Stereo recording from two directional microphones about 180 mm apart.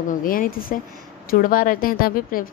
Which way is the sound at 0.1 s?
50° left (ahead or behind).